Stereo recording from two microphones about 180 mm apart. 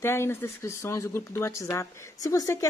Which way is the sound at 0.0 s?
15° left (ahead or behind).